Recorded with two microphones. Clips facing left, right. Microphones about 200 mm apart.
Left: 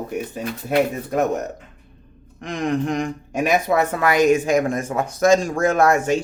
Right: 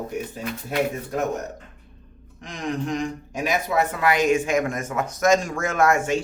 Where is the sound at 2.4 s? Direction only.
55° left (ahead or behind).